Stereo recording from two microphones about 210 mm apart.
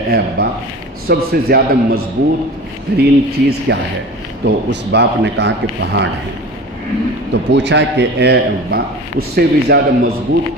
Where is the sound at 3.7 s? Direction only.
55° right (ahead or behind).